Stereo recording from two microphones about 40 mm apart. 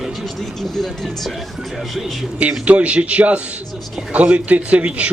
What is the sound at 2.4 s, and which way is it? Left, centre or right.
A man's voice, right.